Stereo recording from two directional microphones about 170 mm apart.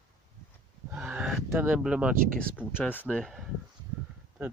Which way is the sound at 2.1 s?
55° right (ahead or behind).